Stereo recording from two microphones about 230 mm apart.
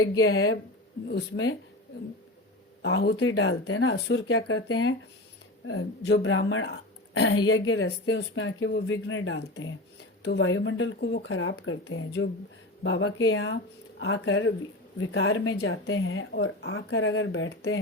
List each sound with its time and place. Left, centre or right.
0.2 s speech: left
2.8 s speech: left
5.6 s a woman's voice: left